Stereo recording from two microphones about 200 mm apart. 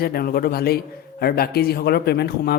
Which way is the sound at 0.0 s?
50° left (ahead or behind).